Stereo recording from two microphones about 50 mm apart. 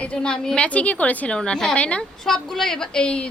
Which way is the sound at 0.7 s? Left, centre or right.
Left.